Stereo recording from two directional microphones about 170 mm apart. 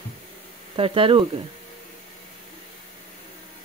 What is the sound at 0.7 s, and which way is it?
Speech, 30° right (ahead or behind).